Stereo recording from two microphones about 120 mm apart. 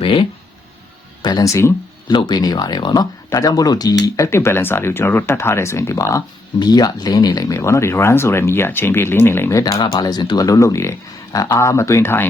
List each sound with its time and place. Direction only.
0.0 s a sound: 45° left (ahead or behind)
1.2 s speech: 35° left (ahead or behind)
2.0 s speech: 40° left (ahead or behind); by 12.2 s 20° left (ahead or behind)